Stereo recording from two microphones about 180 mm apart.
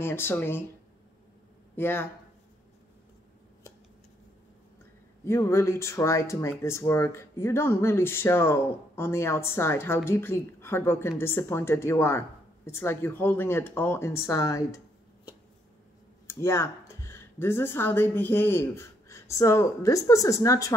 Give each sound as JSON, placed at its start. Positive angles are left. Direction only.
{"t": 0.0, "sound": "speech", "side_deg": 10}
{"t": 1.8, "sound": "speech", "side_deg": 15}
{"t": 5.2, "sound": "speech", "side_deg": 15}
{"t": 16.3, "sound": "speech", "side_deg": 15}